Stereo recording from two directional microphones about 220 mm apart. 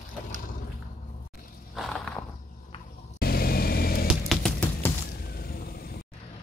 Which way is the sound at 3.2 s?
45° left (ahead or behind).